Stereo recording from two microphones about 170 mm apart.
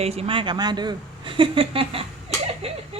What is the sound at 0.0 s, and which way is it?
Speech, 35° right (ahead or behind).